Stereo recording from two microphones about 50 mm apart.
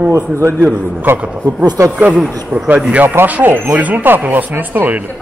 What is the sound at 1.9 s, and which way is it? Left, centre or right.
Speech, centre.